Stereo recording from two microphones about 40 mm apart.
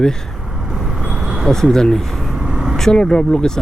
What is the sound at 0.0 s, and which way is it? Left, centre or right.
Speech, centre.